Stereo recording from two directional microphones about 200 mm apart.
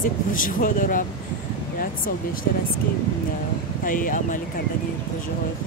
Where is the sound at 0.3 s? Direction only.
45° left (ahead or behind).